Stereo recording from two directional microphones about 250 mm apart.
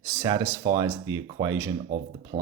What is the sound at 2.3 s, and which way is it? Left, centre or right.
Speech, right.